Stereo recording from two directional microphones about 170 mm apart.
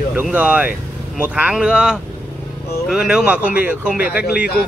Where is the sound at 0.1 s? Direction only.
10° right (ahead or behind).